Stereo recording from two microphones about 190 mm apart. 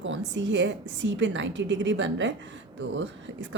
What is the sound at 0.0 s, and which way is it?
Speech, 75° right (ahead or behind).